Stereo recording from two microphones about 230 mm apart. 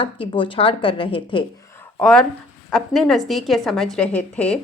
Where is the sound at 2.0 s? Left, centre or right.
Centre.